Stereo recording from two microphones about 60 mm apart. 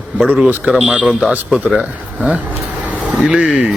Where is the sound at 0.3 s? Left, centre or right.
Centre.